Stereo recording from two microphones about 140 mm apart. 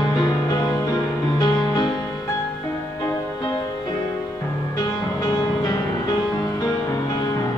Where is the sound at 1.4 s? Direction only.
30° left (ahead or behind).